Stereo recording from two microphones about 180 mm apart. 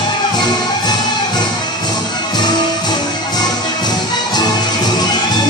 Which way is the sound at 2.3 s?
25° left (ahead or behind).